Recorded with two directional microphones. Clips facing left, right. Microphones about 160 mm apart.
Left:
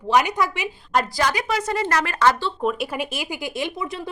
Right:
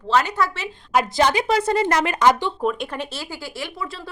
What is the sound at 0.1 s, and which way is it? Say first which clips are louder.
Speech: left 1 dB; 15° left (ahead or behind).